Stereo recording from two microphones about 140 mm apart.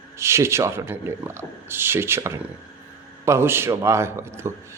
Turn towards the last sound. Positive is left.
turn(degrees=-20)  # may be behind; listen again after turning